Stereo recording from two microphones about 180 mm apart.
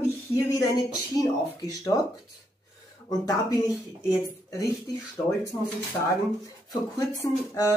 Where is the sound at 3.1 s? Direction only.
20° left (ahead or behind).